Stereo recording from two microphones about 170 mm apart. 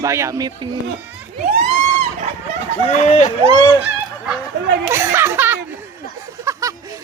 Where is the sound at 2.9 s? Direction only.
45° left (ahead or behind).